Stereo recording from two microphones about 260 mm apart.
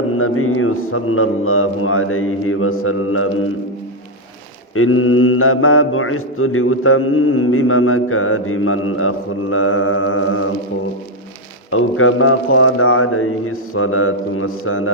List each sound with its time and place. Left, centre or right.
0.2 s mantra: left
4.7 s mantra: left
11.7 s mantra: left